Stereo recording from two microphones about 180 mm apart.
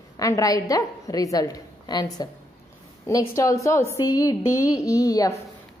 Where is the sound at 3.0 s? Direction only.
15° left (ahead or behind).